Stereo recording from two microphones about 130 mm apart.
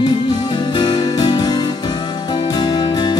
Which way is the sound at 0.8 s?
35° left (ahead or behind).